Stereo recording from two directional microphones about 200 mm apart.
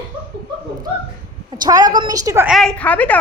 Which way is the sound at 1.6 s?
20° right (ahead or behind).